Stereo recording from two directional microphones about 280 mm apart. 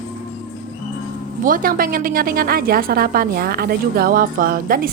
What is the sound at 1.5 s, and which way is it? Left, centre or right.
A woman's voice, right.